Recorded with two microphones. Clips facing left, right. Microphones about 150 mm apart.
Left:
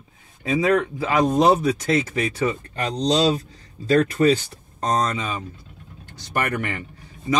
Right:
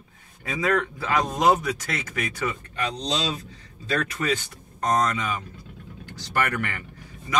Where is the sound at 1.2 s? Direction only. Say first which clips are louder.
Left 5 dB; 30° left (ahead or behind).